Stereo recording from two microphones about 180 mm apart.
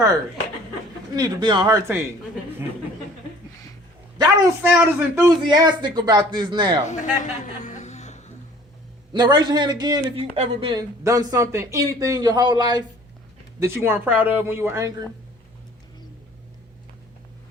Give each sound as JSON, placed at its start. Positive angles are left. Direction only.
{"t": 1.1, "sound": "speech", "side_deg": -20}
{"t": 4.2, "sound": "speech", "side_deg": -20}
{"t": 5.5, "sound": "speech", "side_deg": -25}
{"t": 6.8, "sound": "a sound", "side_deg": 45}
{"t": 9.1, "sound": "speech", "side_deg": -25}
{"t": 10.2, "sound": "speech", "side_deg": -35}
{"t": 13.6, "sound": "speech", "side_deg": -15}